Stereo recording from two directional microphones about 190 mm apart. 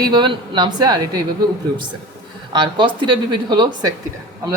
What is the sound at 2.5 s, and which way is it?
Speech, 25° right (ahead or behind).